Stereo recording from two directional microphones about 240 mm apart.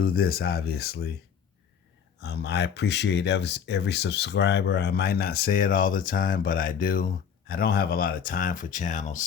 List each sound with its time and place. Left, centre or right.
0.0 s speech: left
2.2 s speech: left